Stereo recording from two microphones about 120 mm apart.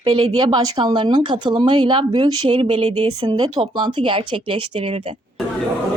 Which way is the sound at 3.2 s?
35° right (ahead or behind).